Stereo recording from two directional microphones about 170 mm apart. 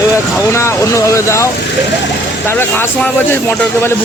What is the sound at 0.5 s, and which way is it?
Speech, 15° left (ahead or behind).